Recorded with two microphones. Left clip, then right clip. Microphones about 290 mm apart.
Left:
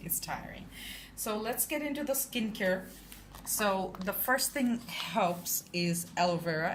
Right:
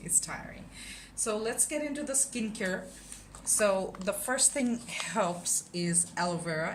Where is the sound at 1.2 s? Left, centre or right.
Centre.